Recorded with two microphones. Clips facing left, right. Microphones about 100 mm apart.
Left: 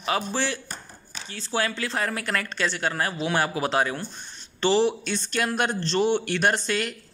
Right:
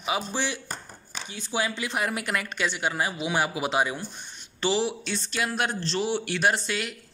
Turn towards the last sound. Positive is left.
turn(degrees=-5)  # may be behind; listen again after turning